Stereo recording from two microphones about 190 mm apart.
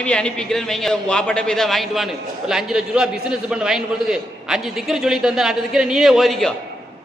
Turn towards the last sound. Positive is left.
turn(degrees=0)  # may be behind; listen again after turning